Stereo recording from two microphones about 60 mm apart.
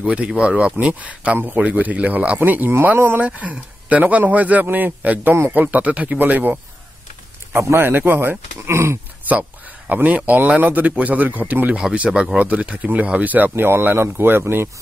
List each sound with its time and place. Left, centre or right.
0.0 s speech: right
7.5 s speech: right
8.5 s speech: right
9.3 s speech: right